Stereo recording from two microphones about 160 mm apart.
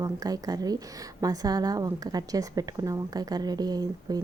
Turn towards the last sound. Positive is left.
turn(degrees=-25)  # may be behind; listen again after turning